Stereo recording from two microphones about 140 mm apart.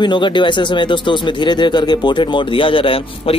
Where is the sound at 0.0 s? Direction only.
35° left (ahead or behind).